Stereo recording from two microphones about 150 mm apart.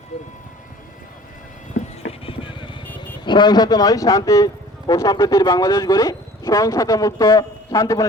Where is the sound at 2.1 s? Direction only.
35° left (ahead or behind).